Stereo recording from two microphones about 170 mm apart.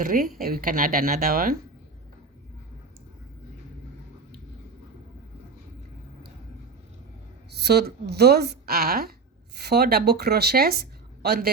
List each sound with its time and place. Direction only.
0.0 s speech: 55° right (ahead or behind)
7.5 s a woman's voice: 75° right (ahead or behind)